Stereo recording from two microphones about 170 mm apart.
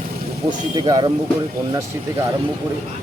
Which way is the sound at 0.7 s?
25° right (ahead or behind).